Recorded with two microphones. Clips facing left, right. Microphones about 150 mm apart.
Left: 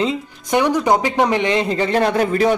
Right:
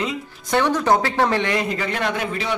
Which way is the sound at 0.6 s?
15° left (ahead or behind).